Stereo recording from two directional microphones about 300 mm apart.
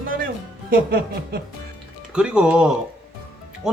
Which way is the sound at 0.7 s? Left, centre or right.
Right.